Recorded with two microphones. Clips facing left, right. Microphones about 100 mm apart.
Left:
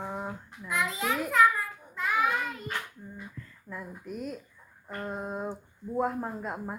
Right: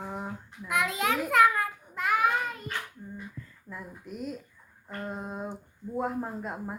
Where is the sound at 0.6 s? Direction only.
60° right (ahead or behind).